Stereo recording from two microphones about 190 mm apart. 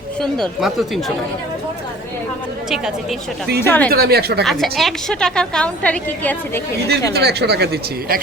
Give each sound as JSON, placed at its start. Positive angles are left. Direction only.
{"t": 0.6, "sound": "a woman's voice", "side_deg": 0}
{"t": 2.6, "sound": "a woman's voice", "side_deg": 0}
{"t": 3.6, "sound": "a woman's voice", "side_deg": 10}
{"t": 3.9, "sound": "speech", "side_deg": -55}
{"t": 4.4, "sound": "a woman's voice", "side_deg": 0}
{"t": 7.1, "sound": "speech", "side_deg": -60}